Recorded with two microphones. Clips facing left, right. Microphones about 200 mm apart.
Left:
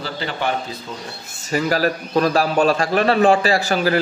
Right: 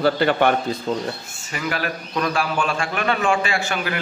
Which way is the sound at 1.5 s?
35° left (ahead or behind).